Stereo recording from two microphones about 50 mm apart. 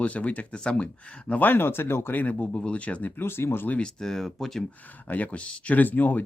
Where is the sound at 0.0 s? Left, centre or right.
Left.